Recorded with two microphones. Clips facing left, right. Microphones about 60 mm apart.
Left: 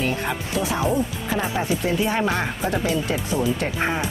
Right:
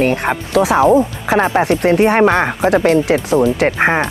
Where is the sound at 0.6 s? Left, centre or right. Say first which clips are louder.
Right 12 dB; right.